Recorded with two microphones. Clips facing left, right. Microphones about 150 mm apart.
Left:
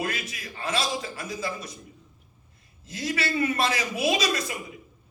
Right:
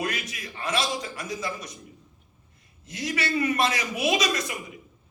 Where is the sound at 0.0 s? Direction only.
30° left (ahead or behind).